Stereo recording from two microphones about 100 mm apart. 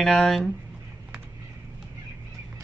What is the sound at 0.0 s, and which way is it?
Speech, 5° left (ahead or behind).